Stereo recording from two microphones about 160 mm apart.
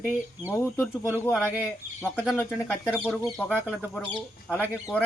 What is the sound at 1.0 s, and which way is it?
Speech, 10° right (ahead or behind).